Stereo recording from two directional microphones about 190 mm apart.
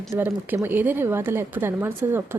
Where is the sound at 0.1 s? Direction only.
10° right (ahead or behind).